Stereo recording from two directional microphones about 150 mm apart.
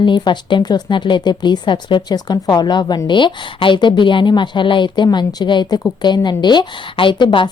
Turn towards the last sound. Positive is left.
turn(degrees=30)  # may be behind; listen again after turning